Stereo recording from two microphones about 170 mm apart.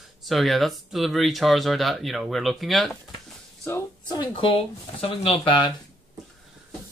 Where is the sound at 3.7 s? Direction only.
25° left (ahead or behind).